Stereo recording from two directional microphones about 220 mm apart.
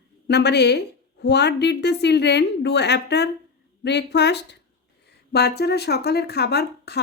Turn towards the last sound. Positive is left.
turn(degrees=50)  # may be behind; listen again after turning